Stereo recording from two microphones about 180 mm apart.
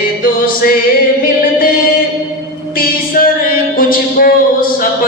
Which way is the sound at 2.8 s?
55° left (ahead or behind).